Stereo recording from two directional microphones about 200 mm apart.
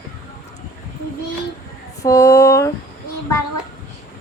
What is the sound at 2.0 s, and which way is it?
Speech, 15° left (ahead or behind).